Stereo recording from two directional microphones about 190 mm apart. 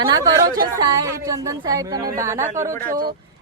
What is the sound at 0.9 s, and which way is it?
A woman's voice, 15° right (ahead or behind).